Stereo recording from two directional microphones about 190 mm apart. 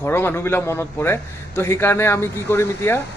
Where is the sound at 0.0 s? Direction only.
10° left (ahead or behind).